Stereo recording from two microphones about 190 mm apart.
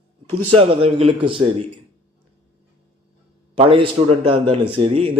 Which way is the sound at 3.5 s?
30° right (ahead or behind).